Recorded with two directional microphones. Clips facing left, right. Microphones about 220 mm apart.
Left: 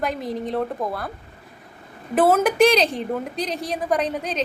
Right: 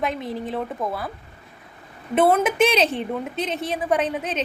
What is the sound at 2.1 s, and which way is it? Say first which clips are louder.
A woman's voice: left 1 dB; centre (ahead or behind).